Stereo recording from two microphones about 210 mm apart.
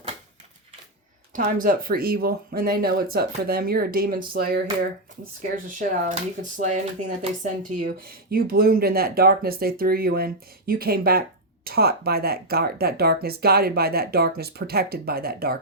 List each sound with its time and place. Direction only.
1.3 s speech: 40° right (ahead or behind)